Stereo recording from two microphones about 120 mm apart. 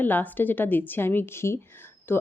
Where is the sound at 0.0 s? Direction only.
15° left (ahead or behind).